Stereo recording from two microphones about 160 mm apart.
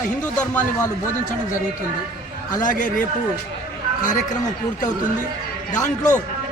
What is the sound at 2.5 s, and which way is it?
A man's voice, 55° left (ahead or behind).